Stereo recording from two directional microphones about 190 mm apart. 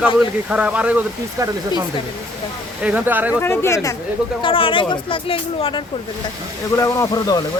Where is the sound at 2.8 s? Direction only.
10° right (ahead or behind).